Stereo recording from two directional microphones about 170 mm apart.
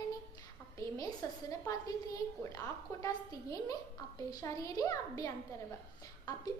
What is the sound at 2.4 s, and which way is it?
A woman's voice, 20° left (ahead or behind).